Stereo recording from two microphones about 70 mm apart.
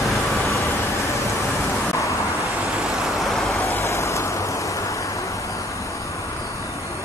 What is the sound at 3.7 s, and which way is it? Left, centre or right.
Vehicle, left.